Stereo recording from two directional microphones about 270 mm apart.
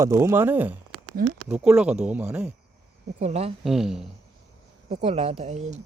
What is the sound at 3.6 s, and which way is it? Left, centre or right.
Speech, centre.